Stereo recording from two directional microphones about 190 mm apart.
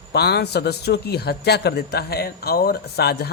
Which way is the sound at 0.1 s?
60° left (ahead or behind).